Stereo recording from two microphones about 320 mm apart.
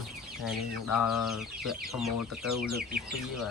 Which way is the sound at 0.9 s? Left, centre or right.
Centre.